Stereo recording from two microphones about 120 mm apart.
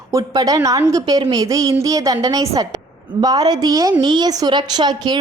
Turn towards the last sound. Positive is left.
turn(degrees=-35)  # may be behind; listen again after turning